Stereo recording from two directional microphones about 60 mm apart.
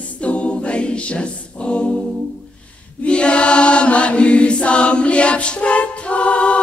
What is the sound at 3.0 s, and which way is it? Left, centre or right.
Chant, centre.